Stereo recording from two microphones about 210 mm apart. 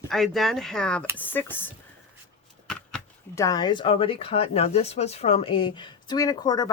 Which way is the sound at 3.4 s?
15° left (ahead or behind).